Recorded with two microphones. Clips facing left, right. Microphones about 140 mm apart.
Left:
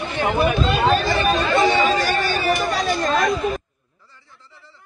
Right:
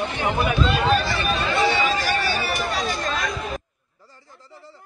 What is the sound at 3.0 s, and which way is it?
Chatter, 45° left (ahead or behind).